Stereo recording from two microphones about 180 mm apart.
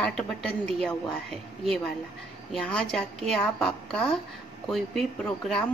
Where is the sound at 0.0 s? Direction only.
5° left (ahead or behind).